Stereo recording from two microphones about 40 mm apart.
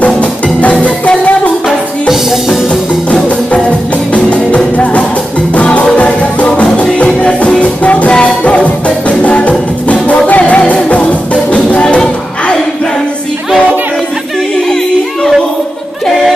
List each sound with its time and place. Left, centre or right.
0.0 s music: left
1.7 s music: centre
4.1 s music: left
5.9 s music: left